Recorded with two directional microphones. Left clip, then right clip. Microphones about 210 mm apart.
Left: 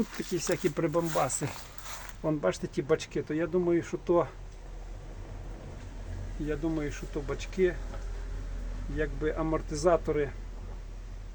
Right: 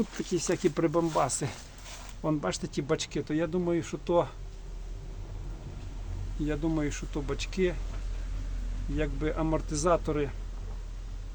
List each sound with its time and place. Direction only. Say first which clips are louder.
0.3 s speech: right 2 dB; 5° right (ahead or behind)
6.5 s speech: right 1 dB; 20° right (ahead or behind)
9.0 s speech: even; 15° right (ahead or behind)